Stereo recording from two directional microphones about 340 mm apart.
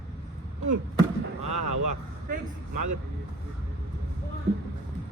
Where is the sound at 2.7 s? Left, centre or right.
Right.